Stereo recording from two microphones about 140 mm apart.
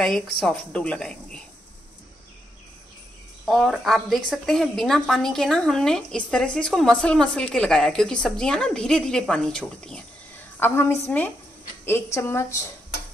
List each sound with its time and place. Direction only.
0.0 s a woman's voice: 5° left (ahead or behind)
3.4 s a woman's voice: centre (ahead or behind)
10.6 s a woman's voice: 15° left (ahead or behind)